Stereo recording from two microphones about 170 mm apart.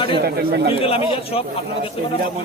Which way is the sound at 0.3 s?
70° right (ahead or behind).